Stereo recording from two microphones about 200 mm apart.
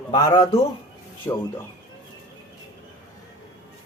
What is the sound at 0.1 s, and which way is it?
A man's voice, 20° left (ahead or behind).